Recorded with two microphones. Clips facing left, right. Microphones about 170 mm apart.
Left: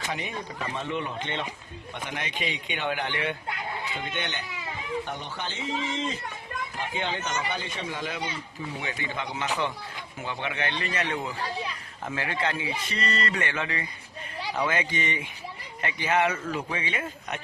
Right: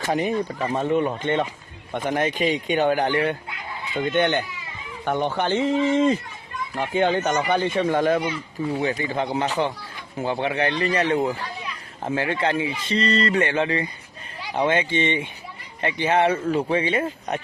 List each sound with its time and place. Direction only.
0.0 s speech: 45° right (ahead or behind)
4.1 s speech: 55° right (ahead or behind)
5.0 s speech: 65° right (ahead or behind)
8.8 s a man's voice: 40° right (ahead or behind)
11.3 s children playing: 35° left (ahead or behind)
12.0 s a man's voice: 30° right (ahead or behind)